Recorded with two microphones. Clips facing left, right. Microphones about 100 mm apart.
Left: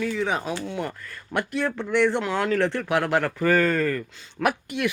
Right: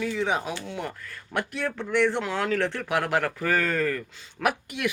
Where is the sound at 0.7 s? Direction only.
Centre (ahead or behind).